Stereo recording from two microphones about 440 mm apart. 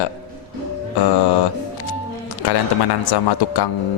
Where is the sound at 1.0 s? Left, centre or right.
Left.